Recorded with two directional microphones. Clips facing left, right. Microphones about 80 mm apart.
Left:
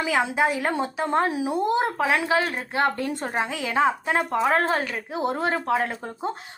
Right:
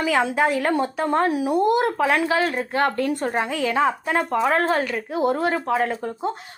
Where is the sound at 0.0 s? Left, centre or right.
Centre.